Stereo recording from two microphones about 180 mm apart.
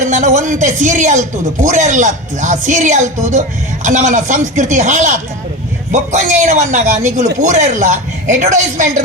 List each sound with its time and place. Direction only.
0.0 s a man's voice: 40° right (ahead or behind)